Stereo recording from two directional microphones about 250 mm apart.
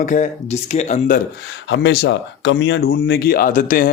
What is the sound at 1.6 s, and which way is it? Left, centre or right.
Speech, left.